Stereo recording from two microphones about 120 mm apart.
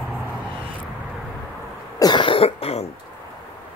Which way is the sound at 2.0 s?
40° left (ahead or behind).